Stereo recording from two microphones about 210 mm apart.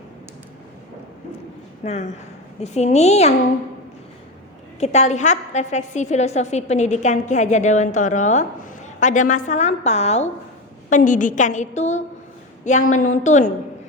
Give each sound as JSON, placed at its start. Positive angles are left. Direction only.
{"t": 1.8, "sound": "a woman's voice", "side_deg": 30}
{"t": 4.8, "sound": "a woman's voice", "side_deg": 30}